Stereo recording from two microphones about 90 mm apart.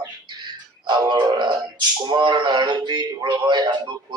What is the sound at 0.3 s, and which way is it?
Music, 55° right (ahead or behind).